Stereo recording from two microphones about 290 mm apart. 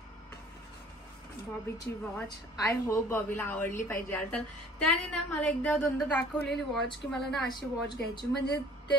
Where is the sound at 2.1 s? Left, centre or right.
Centre.